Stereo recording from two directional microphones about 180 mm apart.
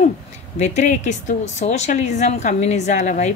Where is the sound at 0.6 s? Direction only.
40° left (ahead or behind).